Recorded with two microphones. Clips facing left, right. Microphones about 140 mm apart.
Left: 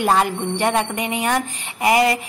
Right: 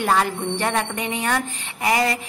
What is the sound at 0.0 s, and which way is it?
A woman's voice, 15° left (ahead or behind).